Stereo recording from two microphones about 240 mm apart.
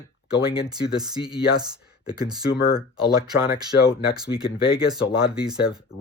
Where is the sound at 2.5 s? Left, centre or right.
Left.